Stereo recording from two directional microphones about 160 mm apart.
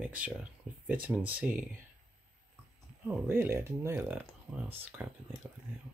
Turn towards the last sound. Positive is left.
turn(degrees=-10)  # may be behind; listen again after turning